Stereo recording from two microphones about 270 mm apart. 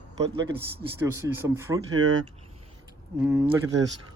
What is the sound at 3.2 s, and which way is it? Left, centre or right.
Speech, centre.